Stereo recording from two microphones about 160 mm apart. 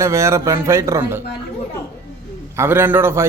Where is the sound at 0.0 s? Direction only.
20° right (ahead or behind).